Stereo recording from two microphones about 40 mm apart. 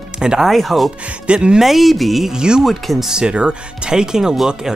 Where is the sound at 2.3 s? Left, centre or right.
Right.